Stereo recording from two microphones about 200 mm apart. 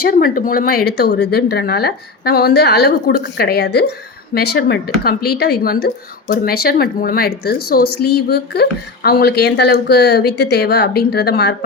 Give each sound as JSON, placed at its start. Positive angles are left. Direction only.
{"t": 0.0, "sound": "speech", "side_deg": 45}